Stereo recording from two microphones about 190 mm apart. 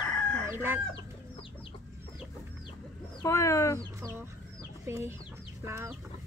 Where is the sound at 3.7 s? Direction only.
15° right (ahead or behind).